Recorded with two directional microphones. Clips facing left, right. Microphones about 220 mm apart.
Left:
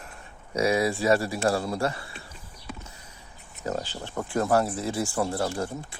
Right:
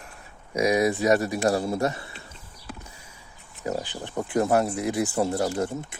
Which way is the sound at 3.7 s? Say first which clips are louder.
Right 1 dB; 15° right (ahead or behind).